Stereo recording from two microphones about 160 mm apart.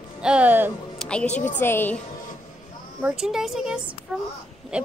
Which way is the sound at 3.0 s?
5° right (ahead or behind).